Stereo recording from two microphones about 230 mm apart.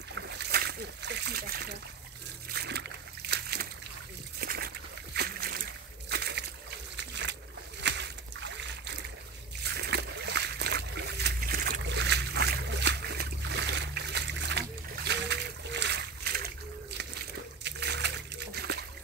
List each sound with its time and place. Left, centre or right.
0.1 s splash: right
4.4 s slosh: right
7.0 s boat: right
7.8 s a sound: right
9.6 s boat: right
17.6 s splash: right